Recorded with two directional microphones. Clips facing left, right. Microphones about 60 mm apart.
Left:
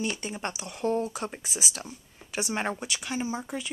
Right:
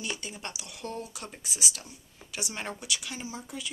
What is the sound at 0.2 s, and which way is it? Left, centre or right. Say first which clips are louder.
Speech: left 6 dB; left.